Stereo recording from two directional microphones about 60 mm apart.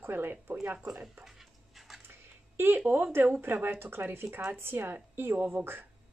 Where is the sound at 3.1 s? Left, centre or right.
Right.